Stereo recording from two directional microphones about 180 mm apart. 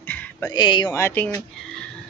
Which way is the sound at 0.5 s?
25° left (ahead or behind).